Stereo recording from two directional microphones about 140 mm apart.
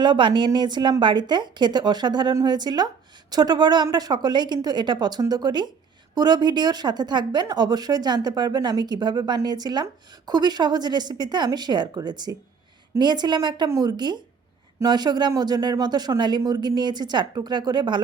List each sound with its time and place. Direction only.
0.0 s a woman's voice: 35° right (ahead or behind)